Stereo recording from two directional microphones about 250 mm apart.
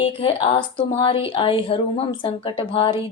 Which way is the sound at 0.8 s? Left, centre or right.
Left.